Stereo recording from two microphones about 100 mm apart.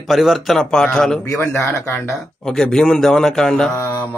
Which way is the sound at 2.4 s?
5° left (ahead or behind).